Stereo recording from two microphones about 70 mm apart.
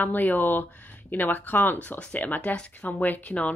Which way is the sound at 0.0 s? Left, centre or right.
Left.